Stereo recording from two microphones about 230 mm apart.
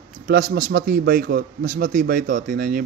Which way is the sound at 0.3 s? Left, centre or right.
Right.